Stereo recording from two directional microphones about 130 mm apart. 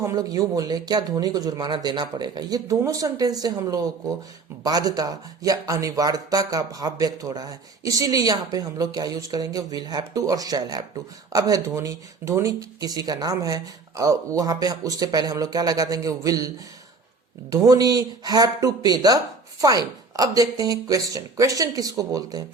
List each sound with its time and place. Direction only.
0.0 s speech: 25° right (ahead or behind)
17.5 s speech: 25° right (ahead or behind)